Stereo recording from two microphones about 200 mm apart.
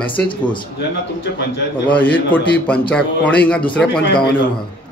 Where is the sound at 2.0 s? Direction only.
10° left (ahead or behind).